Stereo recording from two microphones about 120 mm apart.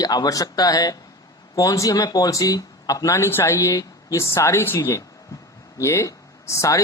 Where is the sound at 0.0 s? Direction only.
35° left (ahead or behind).